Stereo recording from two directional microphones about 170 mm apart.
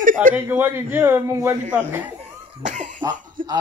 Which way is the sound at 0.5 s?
10° right (ahead or behind).